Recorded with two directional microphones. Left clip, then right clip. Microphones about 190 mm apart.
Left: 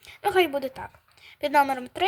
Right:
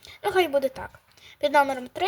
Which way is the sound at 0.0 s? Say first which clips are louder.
Left 1 dB; 5° left (ahead or behind).